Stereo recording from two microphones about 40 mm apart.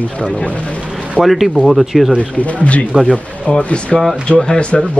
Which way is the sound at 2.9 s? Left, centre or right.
Right.